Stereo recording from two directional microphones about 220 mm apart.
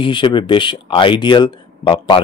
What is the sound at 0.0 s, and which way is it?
A man's voice, 20° left (ahead or behind).